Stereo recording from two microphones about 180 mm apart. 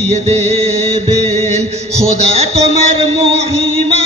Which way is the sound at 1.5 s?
35° right (ahead or behind).